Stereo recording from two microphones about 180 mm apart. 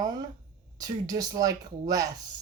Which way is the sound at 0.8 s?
20° right (ahead or behind).